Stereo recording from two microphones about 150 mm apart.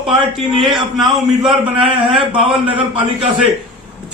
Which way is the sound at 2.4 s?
35° right (ahead or behind).